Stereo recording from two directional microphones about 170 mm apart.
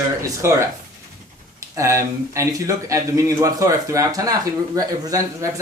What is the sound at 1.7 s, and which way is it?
Speech, 15° right (ahead or behind).